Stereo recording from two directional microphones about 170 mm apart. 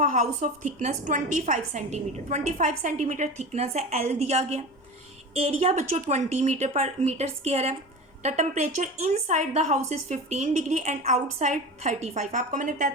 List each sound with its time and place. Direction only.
0.0 s a woman's voice: 45° right (ahead or behind)